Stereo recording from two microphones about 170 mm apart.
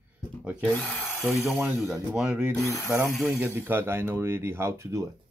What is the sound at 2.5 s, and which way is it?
Mechanisms, 20° left (ahead or behind).